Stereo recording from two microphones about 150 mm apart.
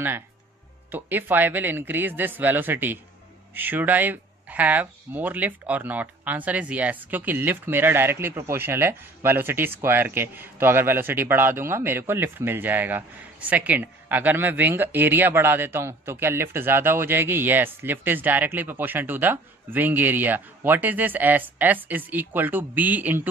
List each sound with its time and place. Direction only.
0.9 s speech: 10° right (ahead or behind)